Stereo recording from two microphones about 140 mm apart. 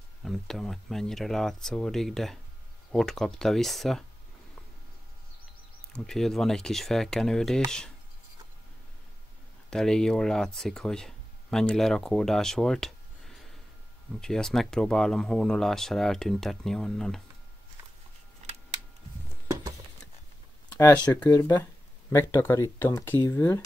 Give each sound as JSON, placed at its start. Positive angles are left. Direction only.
{"t": 0.2, "sound": "speech", "side_deg": 0}
{"t": 5.9, "sound": "speech", "side_deg": 5}
{"t": 9.7, "sound": "speech", "side_deg": 5}
{"t": 19.4, "sound": "a sound", "side_deg": -20}
{"t": 21.0, "sound": "speech", "side_deg": 10}
{"t": 21.3, "sound": "speech", "side_deg": 25}